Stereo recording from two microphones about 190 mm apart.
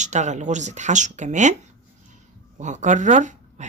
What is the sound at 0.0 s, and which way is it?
Speech, 40° right (ahead or behind).